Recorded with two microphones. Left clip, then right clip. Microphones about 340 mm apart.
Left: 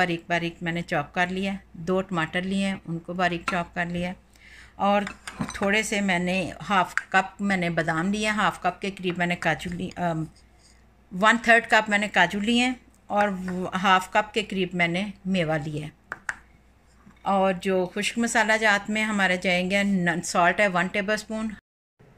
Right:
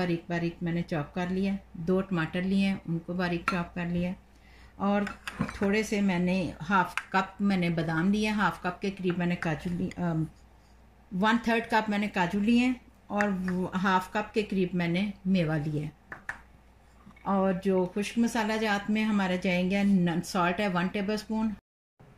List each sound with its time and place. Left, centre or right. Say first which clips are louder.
0.0 s speech: left 7 dB; left
11.1 s speech: left 8 dB; left
17.2 s speech: left 6 dB; left